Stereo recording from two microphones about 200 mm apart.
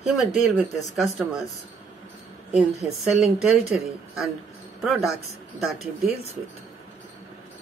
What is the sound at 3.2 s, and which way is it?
Speech, centre (ahead or behind).